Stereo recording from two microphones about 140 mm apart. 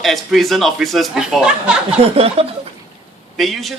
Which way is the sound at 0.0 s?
Centre (ahead or behind).